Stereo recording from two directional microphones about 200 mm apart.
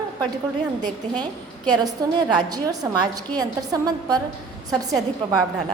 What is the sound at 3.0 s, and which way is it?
A woman's voice, 20° right (ahead or behind).